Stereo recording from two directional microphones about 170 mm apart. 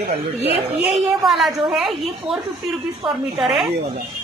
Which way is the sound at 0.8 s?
Centre (ahead or behind).